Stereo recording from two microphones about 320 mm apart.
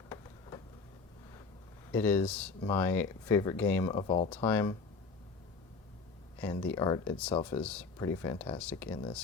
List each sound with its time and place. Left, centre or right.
1.9 s speech: centre
6.4 s speech: centre